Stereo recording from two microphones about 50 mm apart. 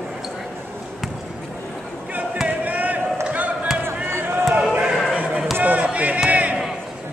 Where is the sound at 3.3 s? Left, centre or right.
Right.